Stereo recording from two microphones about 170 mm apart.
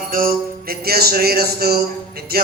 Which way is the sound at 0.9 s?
65° right (ahead or behind).